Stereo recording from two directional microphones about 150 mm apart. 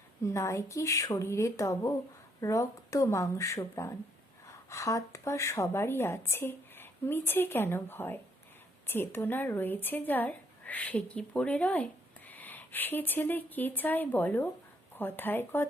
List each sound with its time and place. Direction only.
0.2 s a woman's voice: 20° left (ahead or behind)